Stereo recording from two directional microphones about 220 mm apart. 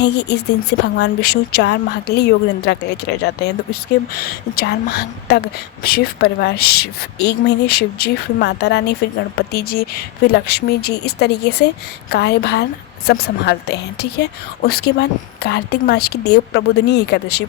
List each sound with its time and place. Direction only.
0.0 s a woman's voice: 50° left (ahead or behind)